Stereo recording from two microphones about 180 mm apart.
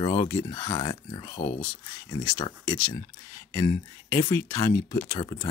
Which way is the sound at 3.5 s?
20° left (ahead or behind).